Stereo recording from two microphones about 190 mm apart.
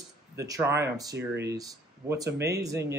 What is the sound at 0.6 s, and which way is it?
A man's voice, 15° right (ahead or behind).